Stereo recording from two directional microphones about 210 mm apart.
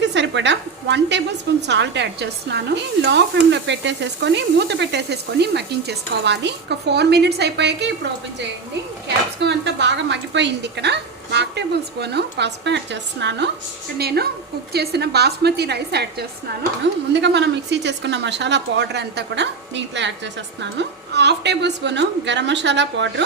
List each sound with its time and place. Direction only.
0.0 s sizzle: 55° right (ahead or behind)
1.6 s speech: 55° right (ahead or behind)
9.0 s a woman's voice: 55° right (ahead or behind)